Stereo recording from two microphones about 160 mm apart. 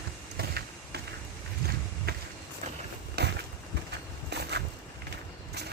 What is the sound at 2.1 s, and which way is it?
Run, 80° right.